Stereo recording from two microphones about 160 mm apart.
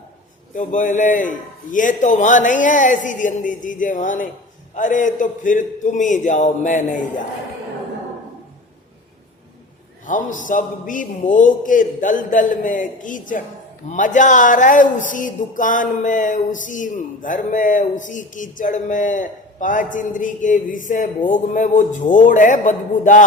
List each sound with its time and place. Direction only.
0.5 s speech: 55° left (ahead or behind)
10.1 s a man's voice: 55° left (ahead or behind)